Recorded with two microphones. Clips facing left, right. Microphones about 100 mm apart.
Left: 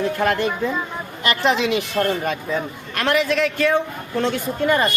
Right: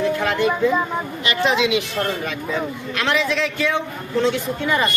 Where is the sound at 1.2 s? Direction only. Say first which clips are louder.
Left 1 dB; 50° left (ahead or behind).